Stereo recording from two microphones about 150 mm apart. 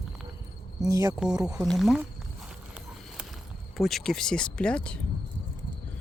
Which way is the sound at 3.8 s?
Centre (ahead or behind).